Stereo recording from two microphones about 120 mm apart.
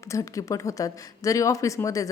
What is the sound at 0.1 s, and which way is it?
A woman's voice, 25° left (ahead or behind).